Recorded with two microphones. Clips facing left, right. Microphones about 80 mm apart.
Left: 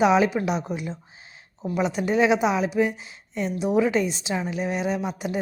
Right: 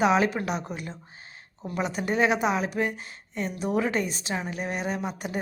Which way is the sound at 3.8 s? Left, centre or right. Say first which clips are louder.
Left 5 dB; right.